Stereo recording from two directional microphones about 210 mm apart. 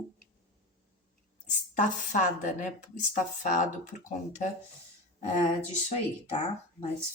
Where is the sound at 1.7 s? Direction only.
35° left (ahead or behind).